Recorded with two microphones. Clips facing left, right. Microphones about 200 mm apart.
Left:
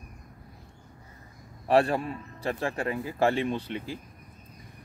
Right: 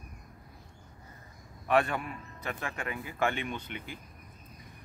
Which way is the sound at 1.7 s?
35° left (ahead or behind).